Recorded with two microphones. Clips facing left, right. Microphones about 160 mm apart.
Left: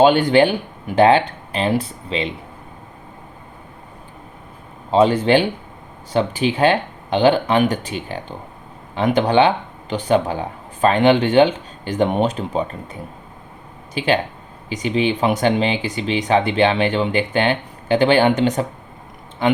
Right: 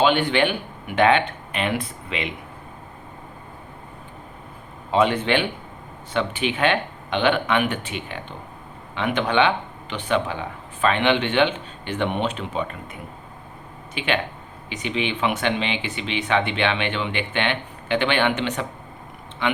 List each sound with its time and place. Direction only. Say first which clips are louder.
0.0 s speech: left 6 dB; 40° left (ahead or behind)
4.9 s speech: left 5 dB; 35° left (ahead or behind)